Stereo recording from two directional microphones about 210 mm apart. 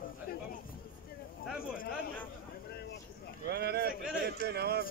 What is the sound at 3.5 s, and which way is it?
Speech, 50° right (ahead or behind).